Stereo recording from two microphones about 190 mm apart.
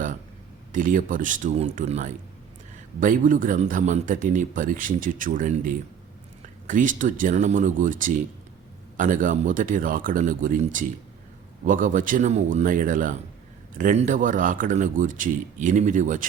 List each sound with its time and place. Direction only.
0.7 s speech: 45° right (ahead or behind)